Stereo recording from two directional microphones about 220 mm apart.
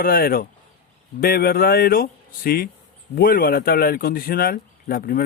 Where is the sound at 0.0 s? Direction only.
40° left (ahead or behind).